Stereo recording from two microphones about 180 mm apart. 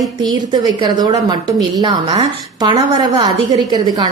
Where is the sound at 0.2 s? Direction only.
25° right (ahead or behind).